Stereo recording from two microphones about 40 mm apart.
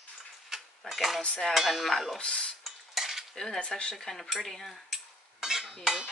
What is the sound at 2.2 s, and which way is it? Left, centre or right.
Speech, left.